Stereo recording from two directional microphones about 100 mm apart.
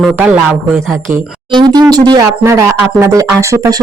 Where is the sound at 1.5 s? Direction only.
45° right (ahead or behind).